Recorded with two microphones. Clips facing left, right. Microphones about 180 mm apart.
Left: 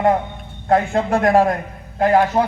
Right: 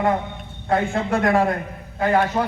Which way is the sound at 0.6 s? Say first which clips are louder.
Left 4 dB; 40° left (ahead or behind).